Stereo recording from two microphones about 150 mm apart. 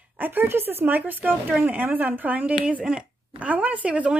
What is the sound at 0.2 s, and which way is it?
Speech, 15° right (ahead or behind).